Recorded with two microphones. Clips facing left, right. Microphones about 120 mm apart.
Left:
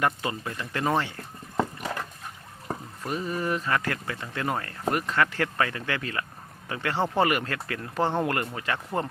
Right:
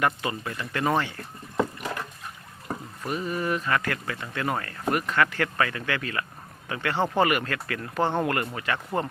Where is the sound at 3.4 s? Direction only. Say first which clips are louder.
Right 1 dB; 25° left (ahead or behind).